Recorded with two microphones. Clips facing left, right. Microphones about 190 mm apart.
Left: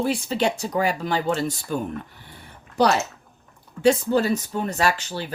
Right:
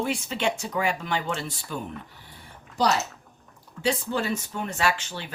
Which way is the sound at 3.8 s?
45° left (ahead or behind).